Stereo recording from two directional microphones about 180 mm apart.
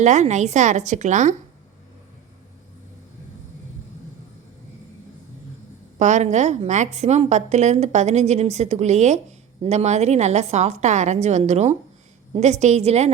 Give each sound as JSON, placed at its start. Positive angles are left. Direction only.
{"t": 0.0, "sound": "a woman's voice", "side_deg": -40}
{"t": 6.0, "sound": "a woman's voice", "side_deg": -40}